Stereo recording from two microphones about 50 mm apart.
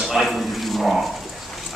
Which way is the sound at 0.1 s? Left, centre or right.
Centre.